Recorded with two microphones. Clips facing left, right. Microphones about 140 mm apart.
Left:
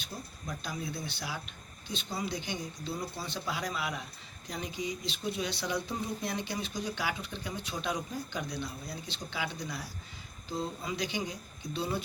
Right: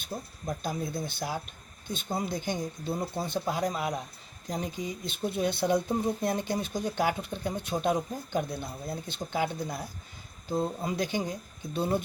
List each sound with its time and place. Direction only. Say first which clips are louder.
0.0 s speech: right 6 dB; 45° right (ahead or behind)